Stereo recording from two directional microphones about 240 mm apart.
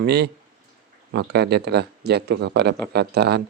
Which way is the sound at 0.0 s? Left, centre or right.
Right.